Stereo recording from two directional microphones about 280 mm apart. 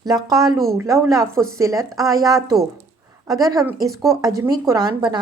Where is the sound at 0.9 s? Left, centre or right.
Centre.